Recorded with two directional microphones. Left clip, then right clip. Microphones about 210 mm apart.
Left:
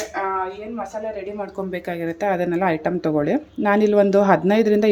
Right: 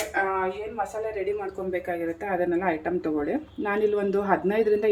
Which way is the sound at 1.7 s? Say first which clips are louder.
Left 2 dB; 50° left (ahead or behind).